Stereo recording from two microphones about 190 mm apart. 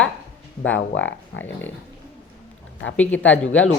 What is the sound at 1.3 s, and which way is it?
Speech, 80° left.